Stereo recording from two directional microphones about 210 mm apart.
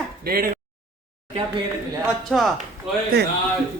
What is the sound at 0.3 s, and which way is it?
Speech, 45° right (ahead or behind).